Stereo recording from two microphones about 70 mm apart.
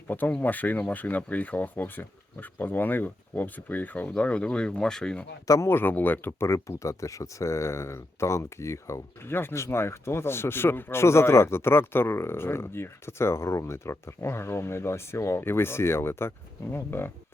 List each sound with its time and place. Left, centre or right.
0.1 s speech: left
5.5 s speech: left
5.7 s speech: left
6.5 s speech: left